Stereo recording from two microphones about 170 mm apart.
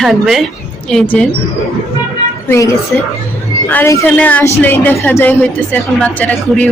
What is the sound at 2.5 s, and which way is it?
A woman's voice, 20° left (ahead or behind).